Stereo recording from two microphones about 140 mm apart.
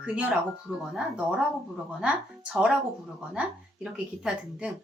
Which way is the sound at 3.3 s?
10° right (ahead or behind).